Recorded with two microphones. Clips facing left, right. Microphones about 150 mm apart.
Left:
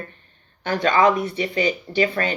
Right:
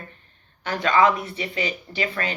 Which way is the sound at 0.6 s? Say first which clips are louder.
Left 2 dB; 35° left (ahead or behind).